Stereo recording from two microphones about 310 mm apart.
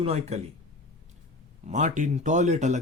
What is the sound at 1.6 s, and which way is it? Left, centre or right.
Speech, right.